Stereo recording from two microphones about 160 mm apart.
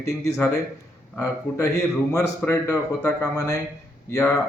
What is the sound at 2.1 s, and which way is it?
Speech, 20° left (ahead or behind).